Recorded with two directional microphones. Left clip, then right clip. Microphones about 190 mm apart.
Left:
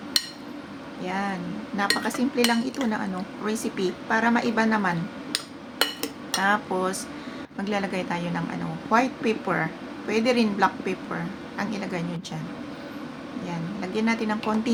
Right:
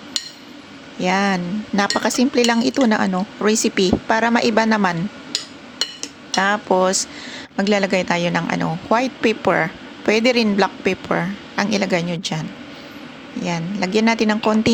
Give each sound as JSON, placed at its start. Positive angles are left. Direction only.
{"t": 1.0, "sound": "dishes", "side_deg": -45}
{"t": 6.4, "sound": "dishes", "side_deg": -45}
{"t": 13.4, "sound": "dishes", "side_deg": -45}